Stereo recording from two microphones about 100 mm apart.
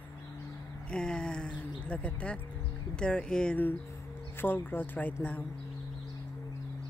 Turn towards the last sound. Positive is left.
turn(degrees=15)  # may be behind; listen again after turning